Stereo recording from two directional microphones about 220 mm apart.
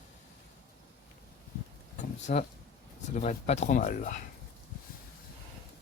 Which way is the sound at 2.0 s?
35° left (ahead or behind).